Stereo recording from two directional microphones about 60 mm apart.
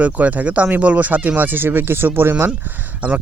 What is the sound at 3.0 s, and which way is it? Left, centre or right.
Speech, right.